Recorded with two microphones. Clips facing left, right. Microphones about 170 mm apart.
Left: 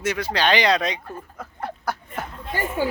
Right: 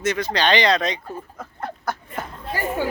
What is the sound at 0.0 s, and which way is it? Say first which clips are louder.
Speech: right 1 dB; 10° left (ahead or behind).